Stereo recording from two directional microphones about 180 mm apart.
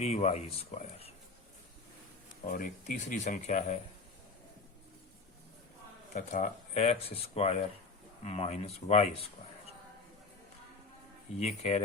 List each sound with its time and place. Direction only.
0.0 s speech: 40° left (ahead or behind)
2.5 s speech: 50° left (ahead or behind)
6.1 s speech: 40° left (ahead or behind)
11.3 s speech: 40° left (ahead or behind)